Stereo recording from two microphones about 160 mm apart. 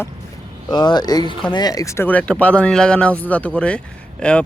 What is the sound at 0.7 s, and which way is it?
Speech, 25° left (ahead or behind).